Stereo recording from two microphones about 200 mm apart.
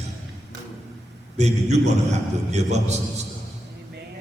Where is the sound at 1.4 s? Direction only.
35° right (ahead or behind).